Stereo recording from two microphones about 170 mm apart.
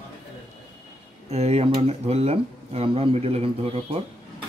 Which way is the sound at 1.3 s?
40° right (ahead or behind).